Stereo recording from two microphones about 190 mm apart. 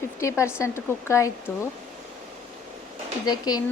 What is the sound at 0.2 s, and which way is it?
Speech, 15° left (ahead or behind).